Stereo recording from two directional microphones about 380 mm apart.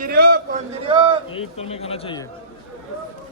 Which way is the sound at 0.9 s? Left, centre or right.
Centre.